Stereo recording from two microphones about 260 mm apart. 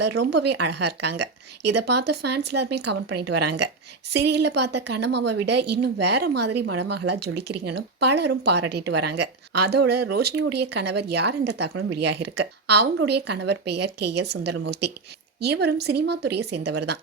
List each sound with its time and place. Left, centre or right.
0.0 s speech: right